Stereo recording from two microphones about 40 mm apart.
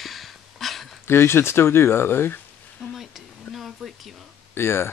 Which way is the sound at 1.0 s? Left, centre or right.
Left.